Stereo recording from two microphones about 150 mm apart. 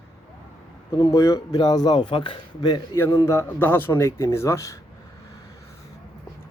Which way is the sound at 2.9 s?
20° left (ahead or behind).